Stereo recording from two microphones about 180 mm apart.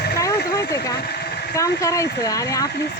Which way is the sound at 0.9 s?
60° left (ahead or behind).